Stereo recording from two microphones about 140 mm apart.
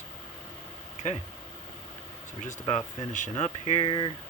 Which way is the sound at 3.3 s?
55° left (ahead or behind).